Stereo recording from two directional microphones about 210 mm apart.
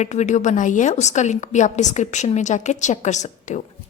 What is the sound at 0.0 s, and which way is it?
A woman's voice, 35° left (ahead or behind).